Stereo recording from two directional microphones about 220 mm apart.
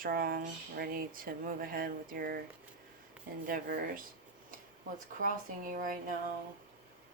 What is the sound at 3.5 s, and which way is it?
Speech, 40° right (ahead or behind).